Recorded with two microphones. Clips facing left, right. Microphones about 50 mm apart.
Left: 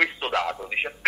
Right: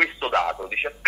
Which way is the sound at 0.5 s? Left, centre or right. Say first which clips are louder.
Right 1 dB; centre.